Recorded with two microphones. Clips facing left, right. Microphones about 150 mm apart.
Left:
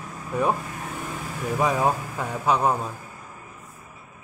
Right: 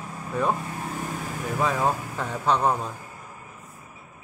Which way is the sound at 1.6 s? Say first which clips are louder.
Left 2 dB; 15° left (ahead or behind).